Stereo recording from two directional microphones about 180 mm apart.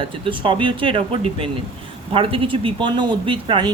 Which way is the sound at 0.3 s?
30° right (ahead or behind).